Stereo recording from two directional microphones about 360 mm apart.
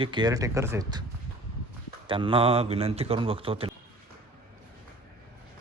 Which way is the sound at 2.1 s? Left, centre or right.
Centre.